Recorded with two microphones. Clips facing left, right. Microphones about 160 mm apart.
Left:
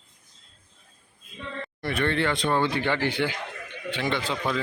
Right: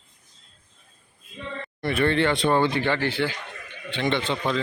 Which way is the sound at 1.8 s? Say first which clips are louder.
Right 4 dB; centre (ahead or behind).